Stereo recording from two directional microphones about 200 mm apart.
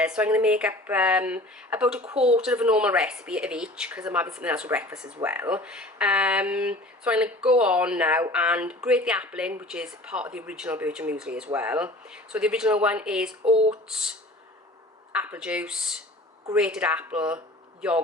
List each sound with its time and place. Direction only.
0.0 s speech: 5° right (ahead or behind)
13.5 s speech: 30° right (ahead or behind)
15.1 s speech: 5° right (ahead or behind)